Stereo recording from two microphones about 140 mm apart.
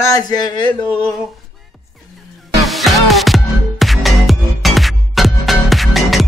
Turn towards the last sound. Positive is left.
turn(degrees=0)  # may be behind; listen again after turning